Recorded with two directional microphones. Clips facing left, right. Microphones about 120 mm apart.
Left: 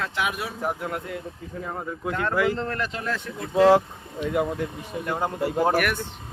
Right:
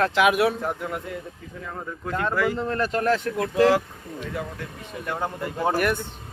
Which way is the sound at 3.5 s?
25° left (ahead or behind).